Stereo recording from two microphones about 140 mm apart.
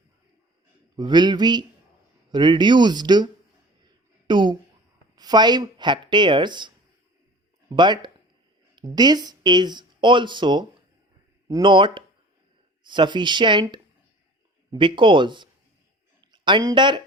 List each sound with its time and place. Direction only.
0.9 s speech: 30° right (ahead or behind)
4.3 s a sound: 35° right (ahead or behind)
5.1 s speech: 30° right (ahead or behind)